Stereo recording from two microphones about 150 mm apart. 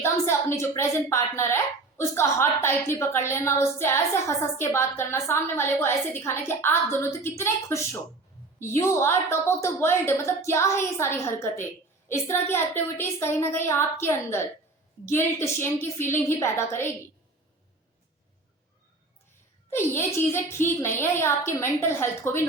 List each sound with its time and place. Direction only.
0.0 s a woman's voice: 15° left (ahead or behind)
19.7 s a woman's voice: 15° left (ahead or behind)